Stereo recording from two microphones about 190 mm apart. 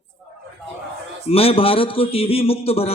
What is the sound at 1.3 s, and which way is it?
A man's voice, 30° left (ahead or behind).